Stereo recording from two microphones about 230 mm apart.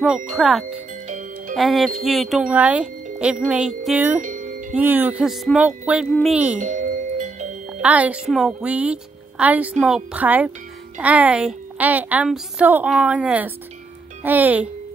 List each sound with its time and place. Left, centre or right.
0.0 s a woman's voice: centre
4.2 s music: right
4.7 s a woman's voice: centre
6.6 s music: right
7.8 s a woman's voice: centre